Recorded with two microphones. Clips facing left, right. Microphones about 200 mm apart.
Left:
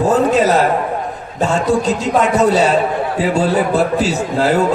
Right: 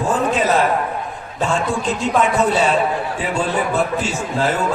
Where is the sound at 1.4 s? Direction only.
40° left (ahead or behind).